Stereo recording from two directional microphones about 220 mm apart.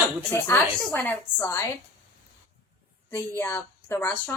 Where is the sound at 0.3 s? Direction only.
15° left (ahead or behind).